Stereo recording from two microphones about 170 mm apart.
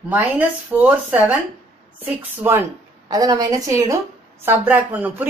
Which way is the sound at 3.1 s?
20° right (ahead or behind).